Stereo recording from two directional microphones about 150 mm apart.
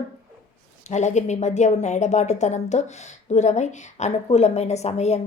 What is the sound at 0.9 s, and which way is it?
Speech, 50° left (ahead or behind).